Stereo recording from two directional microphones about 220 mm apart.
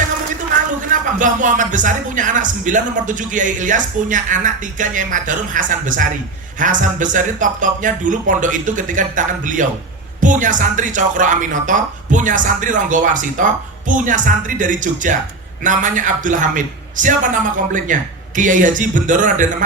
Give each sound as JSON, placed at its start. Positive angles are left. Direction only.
{"t": 1.2, "sound": "speech", "side_deg": -35}